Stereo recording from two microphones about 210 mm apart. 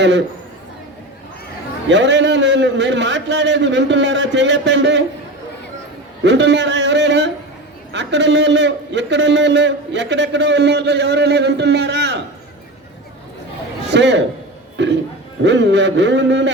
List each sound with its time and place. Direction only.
1.9 s a man's voice: 60° right (ahead or behind)
6.2 s a man's voice: 55° right (ahead or behind)
13.9 s a man's voice: 55° right (ahead or behind)
14.8 s a sound: 55° right (ahead or behind)
15.4 s a man's voice: 55° right (ahead or behind)